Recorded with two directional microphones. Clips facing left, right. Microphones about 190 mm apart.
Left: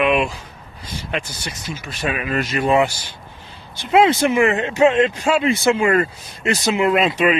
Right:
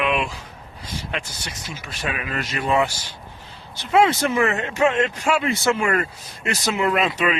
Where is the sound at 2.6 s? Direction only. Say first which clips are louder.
Left 4 dB; 20° left (ahead or behind).